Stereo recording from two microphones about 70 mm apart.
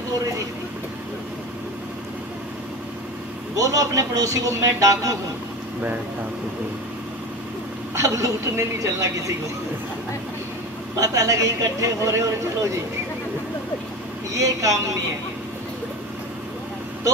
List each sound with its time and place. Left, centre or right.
3.5 s a man's voice: right
7.9 s a man's voice: right
11.0 s a man's voice: right
14.3 s a man's voice: right